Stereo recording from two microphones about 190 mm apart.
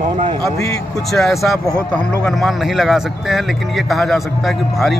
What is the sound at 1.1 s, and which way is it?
A man's voice, centre (ahead or behind).